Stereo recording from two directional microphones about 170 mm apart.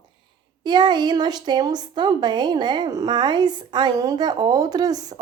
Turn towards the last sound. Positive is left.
turn(degrees=-20)  # may be behind; listen again after turning